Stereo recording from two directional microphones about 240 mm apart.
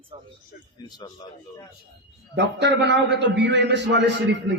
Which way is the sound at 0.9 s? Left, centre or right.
Centre.